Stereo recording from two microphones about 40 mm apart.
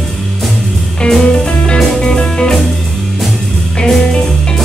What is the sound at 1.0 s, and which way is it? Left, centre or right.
Music, centre.